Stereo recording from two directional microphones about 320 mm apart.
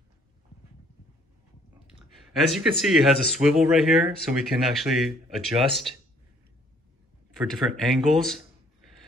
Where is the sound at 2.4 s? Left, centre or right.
Centre.